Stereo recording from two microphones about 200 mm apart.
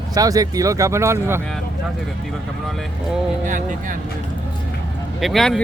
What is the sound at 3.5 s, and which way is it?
Speech, 40° right (ahead or behind).